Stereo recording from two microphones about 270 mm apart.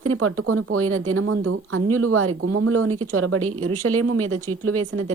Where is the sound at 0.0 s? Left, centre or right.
Right.